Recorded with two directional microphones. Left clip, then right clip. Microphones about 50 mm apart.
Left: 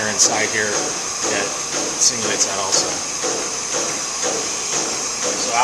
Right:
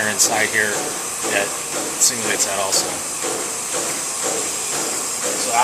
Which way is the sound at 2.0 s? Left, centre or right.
Right.